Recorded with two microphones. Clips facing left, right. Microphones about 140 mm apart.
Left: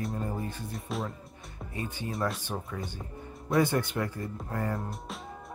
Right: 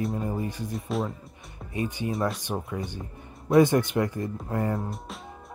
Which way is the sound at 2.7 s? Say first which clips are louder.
Right 4 dB; 15° right (ahead or behind).